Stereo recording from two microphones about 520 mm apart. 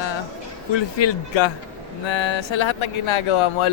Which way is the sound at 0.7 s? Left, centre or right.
Left.